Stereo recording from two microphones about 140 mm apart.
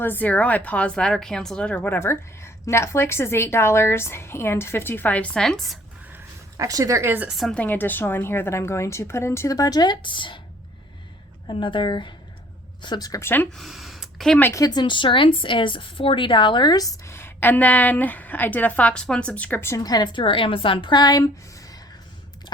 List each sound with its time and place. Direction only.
0.0 s speech: 15° left (ahead or behind)
6.1 s a sound: 25° right (ahead or behind)
7.3 s a woman's voice: centre (ahead or behind); by 10.4 s 35° left (ahead or behind)
11.4 s a woman's voice: 35° left (ahead or behind); by 14.5 s 10° left (ahead or behind)
14.5 s a woman's voice: 25° left (ahead or behind)